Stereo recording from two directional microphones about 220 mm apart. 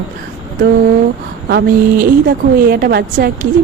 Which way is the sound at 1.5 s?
45° right (ahead or behind).